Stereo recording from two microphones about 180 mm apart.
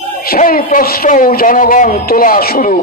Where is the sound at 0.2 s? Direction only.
55° left (ahead or behind).